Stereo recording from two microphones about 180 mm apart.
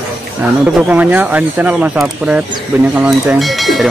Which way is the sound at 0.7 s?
10° right (ahead or behind).